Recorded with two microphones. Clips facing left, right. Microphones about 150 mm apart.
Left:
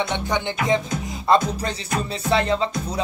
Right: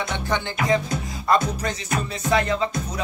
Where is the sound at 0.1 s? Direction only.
20° left (ahead or behind).